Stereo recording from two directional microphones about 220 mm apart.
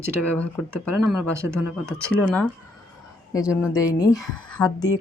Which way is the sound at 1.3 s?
10° right (ahead or behind).